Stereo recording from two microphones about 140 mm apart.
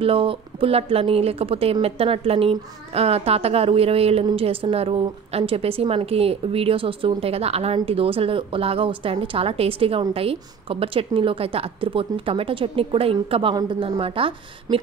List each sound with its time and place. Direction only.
0.0 s a woman's voice: 40° right (ahead or behind)